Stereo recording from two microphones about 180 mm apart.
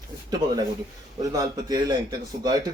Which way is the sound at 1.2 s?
20° right (ahead or behind).